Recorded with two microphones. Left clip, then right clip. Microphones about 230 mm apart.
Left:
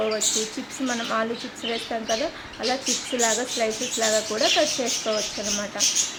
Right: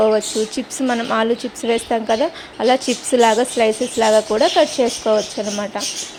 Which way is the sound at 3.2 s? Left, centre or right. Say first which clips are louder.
Right 11 dB; right.